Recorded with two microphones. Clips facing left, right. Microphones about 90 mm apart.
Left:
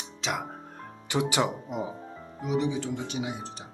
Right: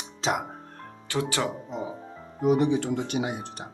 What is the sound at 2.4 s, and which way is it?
Speech, 50° right (ahead or behind).